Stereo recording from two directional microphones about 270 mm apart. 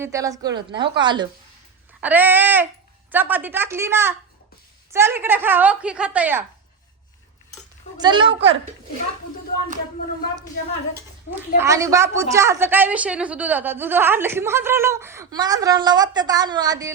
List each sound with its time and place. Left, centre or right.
0.0 s a woman's voice: centre
2.0 s a woman's voice: centre
8.0 s a woman's voice: centre
11.5 s a woman's voice: centre